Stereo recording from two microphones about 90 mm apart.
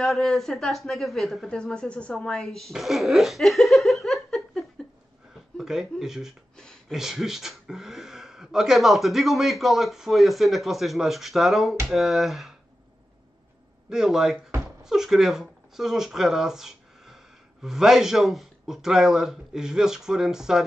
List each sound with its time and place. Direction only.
0.0 s a woman's voice: 5° left (ahead or behind)
2.7 s laughter: centre (ahead or behind)
5.6 s speech: 5° right (ahead or behind)
6.5 s speech: 10° left (ahead or behind)
6.9 s speech: 5° right (ahead or behind)
13.8 s speech: 5° right (ahead or behind)